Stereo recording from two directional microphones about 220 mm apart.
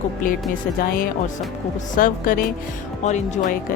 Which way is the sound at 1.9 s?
40° left (ahead or behind).